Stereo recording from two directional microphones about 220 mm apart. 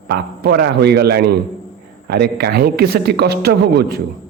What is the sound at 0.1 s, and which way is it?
Speech, 45° right (ahead or behind).